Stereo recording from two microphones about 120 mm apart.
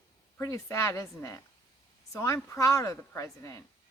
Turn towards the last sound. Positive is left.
turn(degrees=25)  # may be behind; listen again after turning